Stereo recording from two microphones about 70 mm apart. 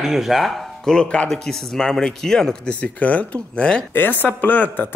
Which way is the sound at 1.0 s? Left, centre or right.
Centre.